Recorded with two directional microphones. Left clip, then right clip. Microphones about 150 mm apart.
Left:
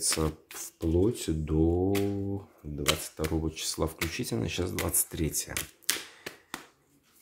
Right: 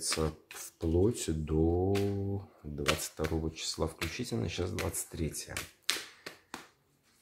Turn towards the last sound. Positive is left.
turn(degrees=15)  # may be behind; listen again after turning